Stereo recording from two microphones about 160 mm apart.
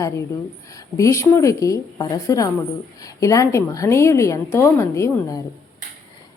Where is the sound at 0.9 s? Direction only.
20° left (ahead or behind).